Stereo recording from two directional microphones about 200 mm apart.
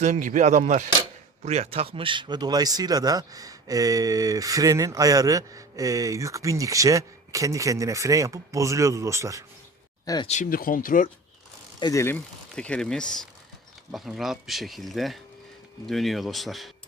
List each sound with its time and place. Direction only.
0.0 s speech: 40° right (ahead or behind); by 9.4 s 15° right (ahead or behind)
10.2 s speech: 40° left (ahead or behind)
11.8 s speech: 15° left (ahead or behind); by 16.7 s centre (ahead or behind)